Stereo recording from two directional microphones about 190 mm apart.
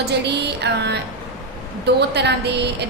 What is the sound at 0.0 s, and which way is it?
Speech, 60° right (ahead or behind).